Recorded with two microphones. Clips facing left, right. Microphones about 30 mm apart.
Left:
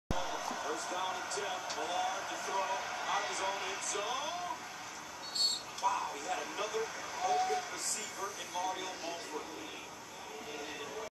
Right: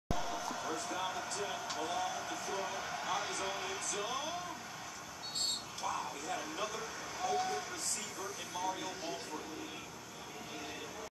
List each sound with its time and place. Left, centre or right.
0.1 s a sound: centre
0.6 s speech: centre
5.9 s speech: centre